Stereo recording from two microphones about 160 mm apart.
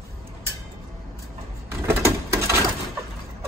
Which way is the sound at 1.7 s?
15° right (ahead or behind).